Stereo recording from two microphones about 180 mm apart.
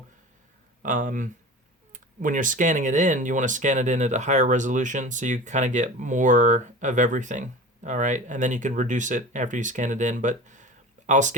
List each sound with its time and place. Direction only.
0.8 s speech: 45° right (ahead or behind)